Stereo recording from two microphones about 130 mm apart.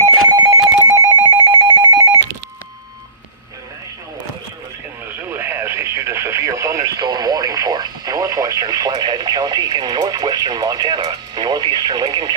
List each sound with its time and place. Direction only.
0.0 s telephone: 30° right (ahead or behind)
5.3 s radio: 20° right (ahead or behind); by 12.3 s 35° right (ahead or behind)